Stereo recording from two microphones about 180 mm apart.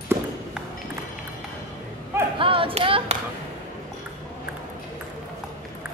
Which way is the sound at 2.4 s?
30° right (ahead or behind).